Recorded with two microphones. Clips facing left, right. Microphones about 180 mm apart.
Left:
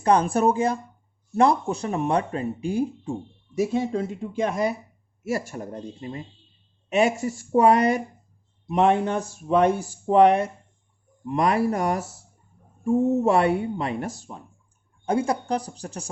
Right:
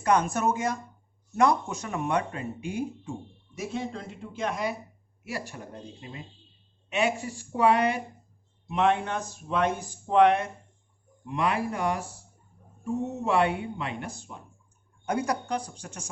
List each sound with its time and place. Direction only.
0.0 s speech: 30° left (ahead or behind)